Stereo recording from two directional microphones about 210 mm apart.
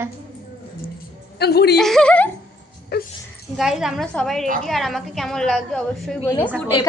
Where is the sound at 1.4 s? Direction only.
50° left (ahead or behind).